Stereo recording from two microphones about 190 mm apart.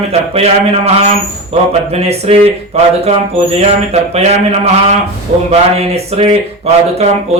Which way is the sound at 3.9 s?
35° right (ahead or behind).